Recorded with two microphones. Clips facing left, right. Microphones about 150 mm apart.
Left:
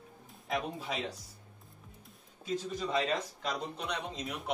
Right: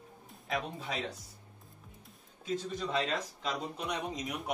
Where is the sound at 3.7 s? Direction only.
10° right (ahead or behind).